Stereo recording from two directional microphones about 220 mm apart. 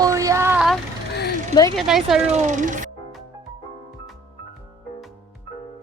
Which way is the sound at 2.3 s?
30° right (ahead or behind).